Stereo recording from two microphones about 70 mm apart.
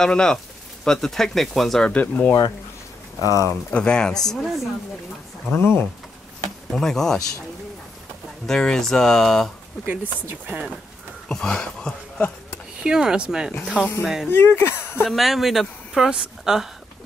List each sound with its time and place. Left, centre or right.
0.0 s speech: centre
1.9 s speech: left
3.2 s speech: left
3.7 s speech: centre
5.5 s speech: left
6.7 s speech: centre
8.5 s speech: centre
9.8 s speech: right
11.2 s speech: centre
12.8 s speech: centre
14.3 s speech: left
15.0 s speech: centre